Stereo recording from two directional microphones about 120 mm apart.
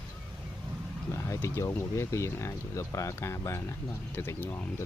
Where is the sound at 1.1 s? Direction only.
20° left (ahead or behind).